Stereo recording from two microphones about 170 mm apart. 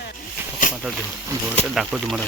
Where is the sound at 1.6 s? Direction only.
5° right (ahead or behind).